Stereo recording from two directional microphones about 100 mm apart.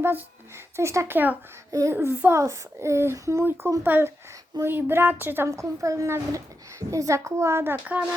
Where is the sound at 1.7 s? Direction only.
35° right (ahead or behind).